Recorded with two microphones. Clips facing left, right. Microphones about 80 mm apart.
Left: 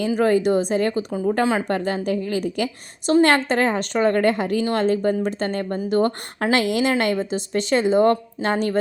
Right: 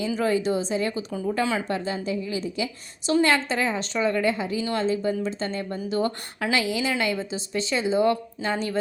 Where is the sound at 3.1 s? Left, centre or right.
Left.